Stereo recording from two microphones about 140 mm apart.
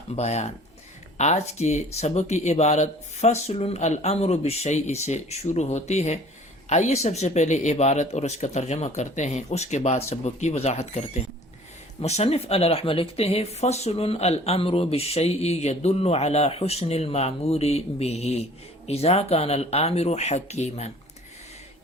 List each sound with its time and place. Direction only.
0.2 s speech: 50° left (ahead or behind)